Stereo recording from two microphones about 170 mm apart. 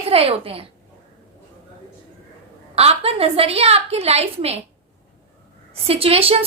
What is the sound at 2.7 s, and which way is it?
Speech, 35° right (ahead or behind).